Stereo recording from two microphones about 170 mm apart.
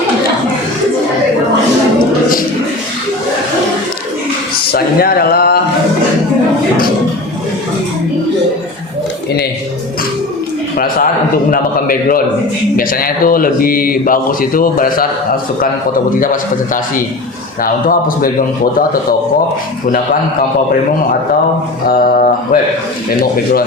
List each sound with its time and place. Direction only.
4.7 s a sound: 65° left (ahead or behind)
11.5 s speech: 55° left (ahead or behind)
16.2 s a man's voice: 50° left (ahead or behind)
21.8 s speech: 55° left (ahead or behind)